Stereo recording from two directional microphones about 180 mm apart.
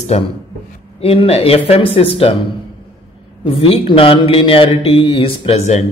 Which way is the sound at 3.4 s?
30° left (ahead or behind).